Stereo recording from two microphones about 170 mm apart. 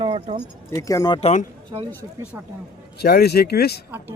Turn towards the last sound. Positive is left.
turn(degrees=70)  # may be behind; listen again after turning